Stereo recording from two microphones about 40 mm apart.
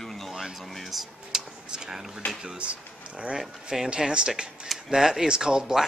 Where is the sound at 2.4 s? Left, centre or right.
Right.